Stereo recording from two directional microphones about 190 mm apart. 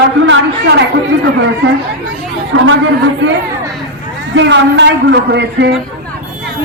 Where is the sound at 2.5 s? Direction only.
90° right.